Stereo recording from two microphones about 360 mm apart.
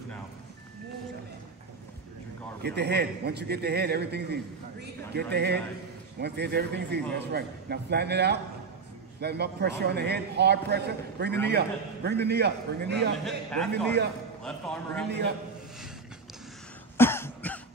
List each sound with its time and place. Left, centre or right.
2.6 s a man's voice: right
13.2 s a man's voice: centre
15.0 s a man's voice: right
16.9 s cough: centre